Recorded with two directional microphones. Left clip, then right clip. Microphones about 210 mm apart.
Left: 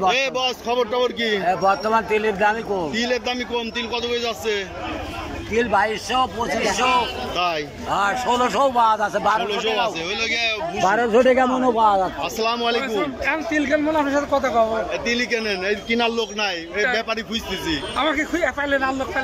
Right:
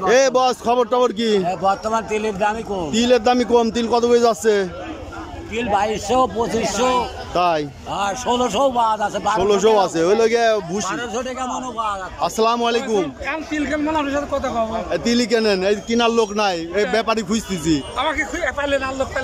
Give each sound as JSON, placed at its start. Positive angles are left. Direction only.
{"t": 0.1, "sound": "a man's voice", "side_deg": -25}
{"t": 5.5, "sound": "a man's voice", "side_deg": -5}
{"t": 9.5, "sound": "speech", "side_deg": -30}
{"t": 10.9, "sound": "a man's voice", "side_deg": 30}
{"t": 12.2, "sound": "a man's voice", "side_deg": -20}
{"t": 13.2, "sound": "a man's voice", "side_deg": 0}
{"t": 14.9, "sound": "a man's voice", "side_deg": -20}
{"t": 17.9, "sound": "a man's voice", "side_deg": 0}